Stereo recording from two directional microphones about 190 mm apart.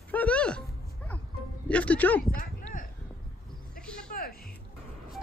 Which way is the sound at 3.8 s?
5° left (ahead or behind).